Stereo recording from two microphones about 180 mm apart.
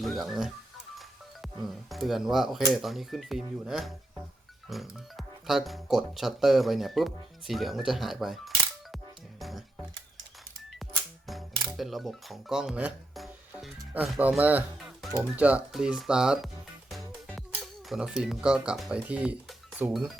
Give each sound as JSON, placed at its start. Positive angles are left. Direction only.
{"t": 0.0, "sound": "speech", "side_deg": 0}
{"t": 1.9, "sound": "speech", "side_deg": 0}
{"t": 9.4, "sound": "music", "side_deg": 0}
{"t": 11.7, "sound": "speech", "side_deg": 0}
{"t": 16.9, "sound": "music", "side_deg": 0}